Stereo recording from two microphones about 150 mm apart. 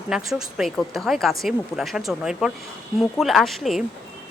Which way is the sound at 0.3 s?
Centre (ahead or behind).